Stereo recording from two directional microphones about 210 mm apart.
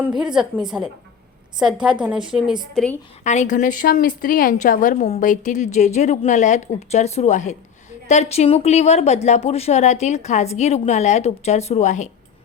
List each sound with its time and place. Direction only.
0.0 s a woman's voice: 5° right (ahead or behind)
3.2 s a woman's voice: 35° left (ahead or behind)